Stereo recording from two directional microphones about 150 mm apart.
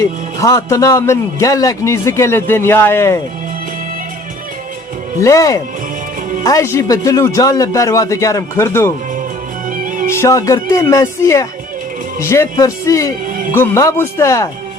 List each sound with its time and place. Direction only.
0.0 s a man's voice: 20° left (ahead or behind)
5.2 s a man's voice: 20° left (ahead or behind)
9.6 s music: 65° right (ahead or behind)
10.1 s a man's voice: 20° left (ahead or behind)
13.2 s music: 70° right (ahead or behind)
13.5 s speech: 20° left (ahead or behind)